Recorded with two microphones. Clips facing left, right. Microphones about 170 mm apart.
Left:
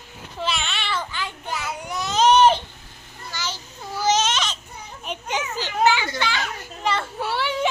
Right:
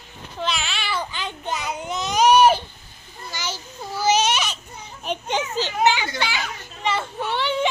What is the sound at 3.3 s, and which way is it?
Baby cry, 15° right (ahead or behind).